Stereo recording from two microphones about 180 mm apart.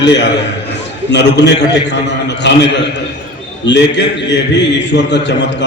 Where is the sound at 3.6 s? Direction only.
75° left (ahead or behind).